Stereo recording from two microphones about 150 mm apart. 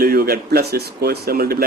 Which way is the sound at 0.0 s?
90° right.